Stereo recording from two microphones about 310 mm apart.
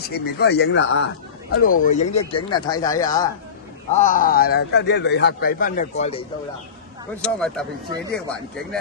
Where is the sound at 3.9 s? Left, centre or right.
Left.